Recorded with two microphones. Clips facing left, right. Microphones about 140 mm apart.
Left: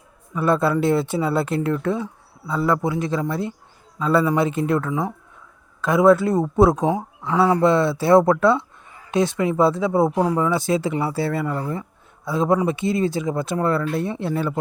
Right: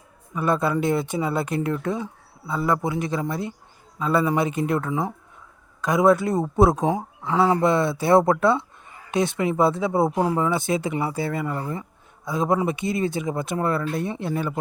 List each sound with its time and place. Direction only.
0.3 s speech: 20° right (ahead or behind)
11.4 s speech: 5° right (ahead or behind)
11.7 s speech: 20° right (ahead or behind)